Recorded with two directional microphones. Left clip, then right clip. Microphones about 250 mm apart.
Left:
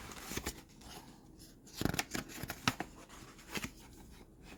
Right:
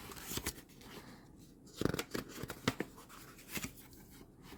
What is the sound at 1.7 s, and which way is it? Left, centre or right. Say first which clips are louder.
Scissors: even; left.